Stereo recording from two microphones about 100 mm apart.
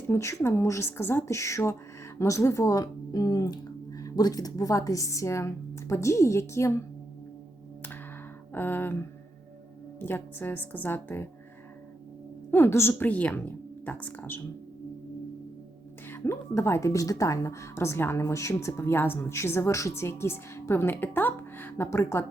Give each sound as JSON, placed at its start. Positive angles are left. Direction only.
{"t": 0.1, "sound": "a woman's voice", "side_deg": 30}
{"t": 8.5, "sound": "a woman's voice", "side_deg": 20}
{"t": 12.5, "sound": "a woman's voice", "side_deg": 20}
{"t": 16.0, "sound": "a woman's voice", "side_deg": 25}